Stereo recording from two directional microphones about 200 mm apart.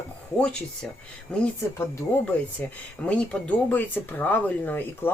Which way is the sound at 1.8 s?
10° left (ahead or behind).